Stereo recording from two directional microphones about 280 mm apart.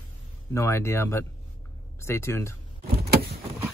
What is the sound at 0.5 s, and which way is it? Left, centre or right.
Speech, centre.